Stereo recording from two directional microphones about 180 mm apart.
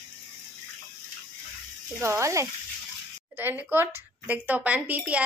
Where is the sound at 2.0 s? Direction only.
15° right (ahead or behind).